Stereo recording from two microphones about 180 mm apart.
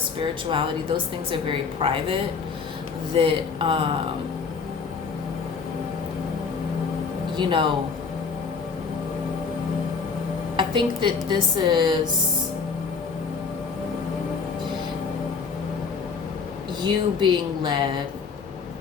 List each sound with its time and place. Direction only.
0.5 s a woman's voice: 30° right (ahead or behind)
3.2 s a woman's voice: 30° right (ahead or behind)
7.3 s a woman's voice: 25° right (ahead or behind)
10.6 s a woman's voice: 25° right (ahead or behind)
16.8 s a woman's voice: 25° right (ahead or behind)